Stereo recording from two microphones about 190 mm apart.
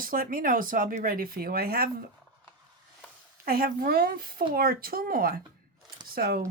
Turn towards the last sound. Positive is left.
turn(degrees=-50)  # may be behind; listen again after turning